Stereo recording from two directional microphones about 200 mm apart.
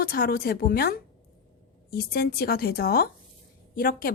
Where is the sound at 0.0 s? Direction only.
50° left (ahead or behind).